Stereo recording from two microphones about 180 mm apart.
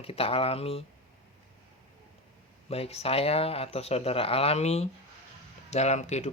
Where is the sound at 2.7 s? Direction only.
35° left (ahead or behind).